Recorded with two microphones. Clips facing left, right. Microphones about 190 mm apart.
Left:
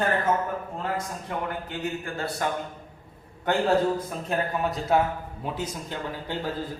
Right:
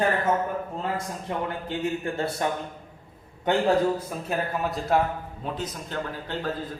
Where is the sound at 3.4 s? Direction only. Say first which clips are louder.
Right 1 dB; 10° right (ahead or behind); by 6.5 s 10° left (ahead or behind).